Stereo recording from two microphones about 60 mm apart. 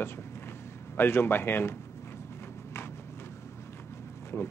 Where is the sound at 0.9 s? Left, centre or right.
Left.